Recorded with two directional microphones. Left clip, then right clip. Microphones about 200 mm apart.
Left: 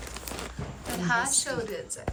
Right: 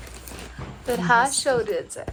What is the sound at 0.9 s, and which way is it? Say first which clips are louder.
A woman's voice: right 7 dB; 5° right (ahead or behind).